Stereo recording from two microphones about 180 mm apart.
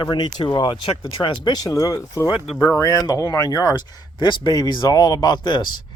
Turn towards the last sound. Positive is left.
turn(degrees=25)  # may be behind; listen again after turning